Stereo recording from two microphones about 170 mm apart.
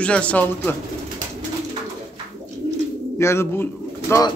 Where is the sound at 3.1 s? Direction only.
15° left (ahead or behind).